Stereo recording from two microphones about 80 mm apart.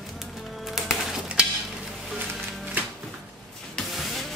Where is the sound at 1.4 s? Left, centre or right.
Centre.